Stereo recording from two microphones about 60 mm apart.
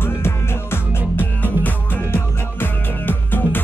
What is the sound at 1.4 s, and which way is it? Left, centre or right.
Music, left.